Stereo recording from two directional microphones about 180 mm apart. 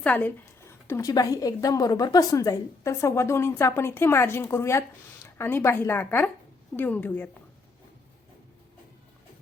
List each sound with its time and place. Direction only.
0.0 s a woman's voice: 10° left (ahead or behind)